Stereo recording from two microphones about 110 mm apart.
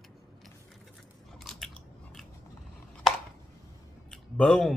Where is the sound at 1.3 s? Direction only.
Centre (ahead or behind).